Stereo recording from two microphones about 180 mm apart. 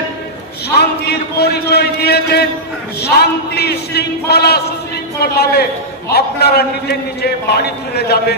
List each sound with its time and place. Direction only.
0.7 s a man's voice: 65° left (ahead or behind)